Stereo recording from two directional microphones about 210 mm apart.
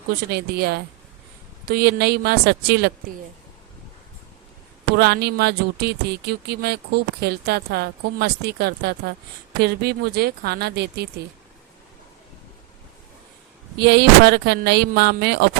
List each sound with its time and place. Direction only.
0.3 s speech: 50° right (ahead or behind)
4.9 s speech: 50° right (ahead or behind)
13.7 s speech: 50° right (ahead or behind)